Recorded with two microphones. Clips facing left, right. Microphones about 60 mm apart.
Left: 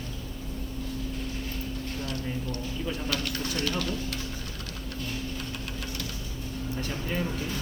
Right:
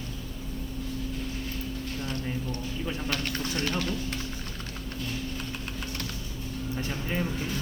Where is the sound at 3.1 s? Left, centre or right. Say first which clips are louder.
Even; right.